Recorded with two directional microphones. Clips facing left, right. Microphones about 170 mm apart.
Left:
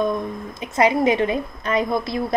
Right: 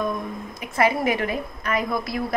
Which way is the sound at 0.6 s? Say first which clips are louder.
Left 3 dB; 20° left (ahead or behind).